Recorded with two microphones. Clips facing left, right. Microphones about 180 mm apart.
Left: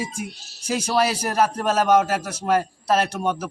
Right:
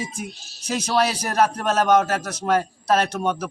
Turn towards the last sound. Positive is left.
turn(degrees=10)  # may be behind; listen again after turning